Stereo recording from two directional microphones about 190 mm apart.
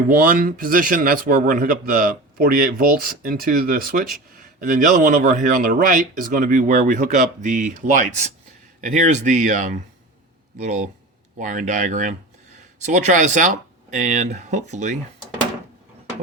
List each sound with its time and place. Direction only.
0.2 s speech: 50° right (ahead or behind)